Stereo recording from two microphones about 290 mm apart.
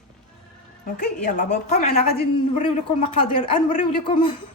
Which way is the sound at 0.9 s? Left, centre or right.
Left.